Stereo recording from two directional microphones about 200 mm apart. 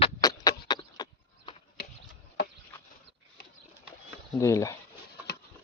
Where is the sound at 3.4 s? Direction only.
50° left (ahead or behind).